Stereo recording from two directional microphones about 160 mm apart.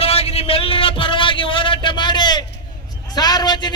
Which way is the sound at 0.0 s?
40° left (ahead or behind).